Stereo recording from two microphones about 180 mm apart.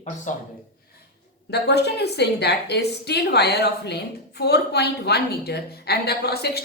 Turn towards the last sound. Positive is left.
turn(degrees=60)  # may be behind; listen again after turning